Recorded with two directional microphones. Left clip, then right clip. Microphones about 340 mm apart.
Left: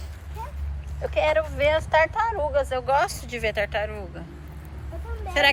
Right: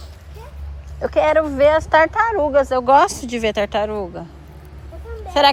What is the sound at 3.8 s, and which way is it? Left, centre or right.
Speech, right.